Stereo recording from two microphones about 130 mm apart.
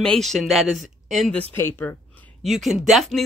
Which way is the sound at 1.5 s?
15° left (ahead or behind).